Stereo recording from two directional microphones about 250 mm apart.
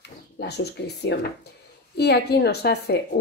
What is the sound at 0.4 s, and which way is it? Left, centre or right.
A woman's voice, left.